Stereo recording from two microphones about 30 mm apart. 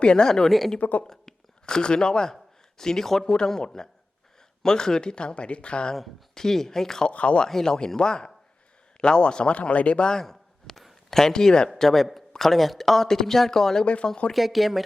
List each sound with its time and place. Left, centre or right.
0.0 s speech: left
0.8 s speech: left
1.0 s speech: centre
1.6 s speech: left
4.6 s speech: left
6.3 s speech: centre
7.1 s speech: left
7.6 s speech: left
9.6 s speech: left
10.2 s a sound: centre
11.2 s speech: centre
11.8 s speech: centre
13.8 s speech: left
14.3 s speech: centre